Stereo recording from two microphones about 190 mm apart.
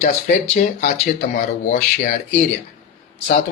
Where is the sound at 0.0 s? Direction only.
35° left (ahead or behind).